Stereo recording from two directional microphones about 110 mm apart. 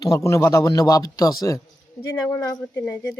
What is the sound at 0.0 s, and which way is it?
Speech, 30° left (ahead or behind).